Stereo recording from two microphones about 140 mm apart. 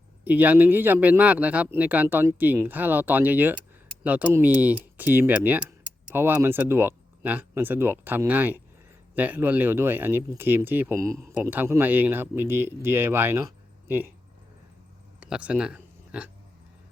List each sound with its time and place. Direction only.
0.3 s speech: 10° right (ahead or behind)
15.2 s speech: 10° right (ahead or behind)